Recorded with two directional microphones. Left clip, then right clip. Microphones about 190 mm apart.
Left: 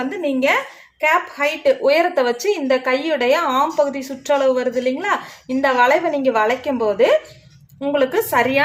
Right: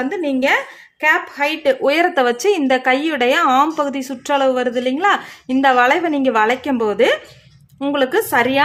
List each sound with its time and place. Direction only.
0.0 s a woman's voice: 30° right (ahead or behind)